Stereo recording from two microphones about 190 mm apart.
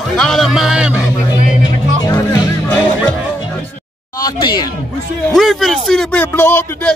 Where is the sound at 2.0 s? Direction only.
20° left (ahead or behind).